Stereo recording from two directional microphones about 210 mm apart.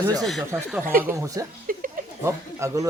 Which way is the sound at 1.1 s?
15° right (ahead or behind).